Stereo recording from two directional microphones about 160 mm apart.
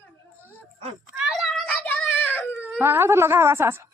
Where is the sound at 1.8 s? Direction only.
10° left (ahead or behind).